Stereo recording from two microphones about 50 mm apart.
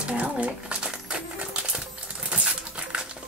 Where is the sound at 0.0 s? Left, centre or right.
Right.